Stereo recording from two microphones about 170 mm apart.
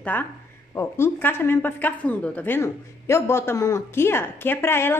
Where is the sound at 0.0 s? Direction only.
10° left (ahead or behind).